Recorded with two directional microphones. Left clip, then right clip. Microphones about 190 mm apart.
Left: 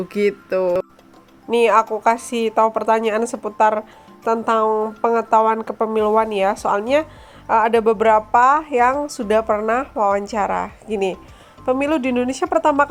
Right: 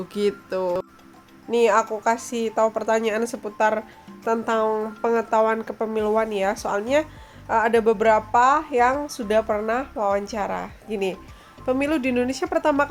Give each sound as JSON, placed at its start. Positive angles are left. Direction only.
{"t": 0.1, "sound": "a woman's voice", "side_deg": 10}